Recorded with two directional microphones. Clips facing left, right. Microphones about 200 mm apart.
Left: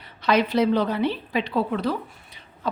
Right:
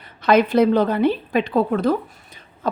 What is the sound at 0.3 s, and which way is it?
A woman's voice, 50° right (ahead or behind).